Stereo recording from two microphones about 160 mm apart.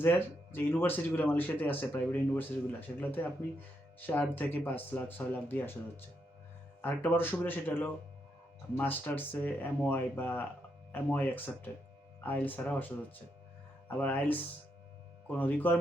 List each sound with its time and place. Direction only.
0.0 s speech: 15° left (ahead or behind)
6.8 s speech: 10° left (ahead or behind)